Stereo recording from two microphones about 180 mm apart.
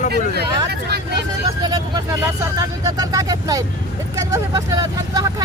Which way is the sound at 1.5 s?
25° right (ahead or behind).